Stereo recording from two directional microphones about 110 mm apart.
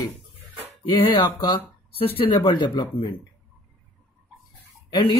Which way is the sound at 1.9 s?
60° left (ahead or behind).